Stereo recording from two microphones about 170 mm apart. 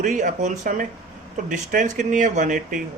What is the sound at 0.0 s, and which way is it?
Speech, 50° right (ahead or behind).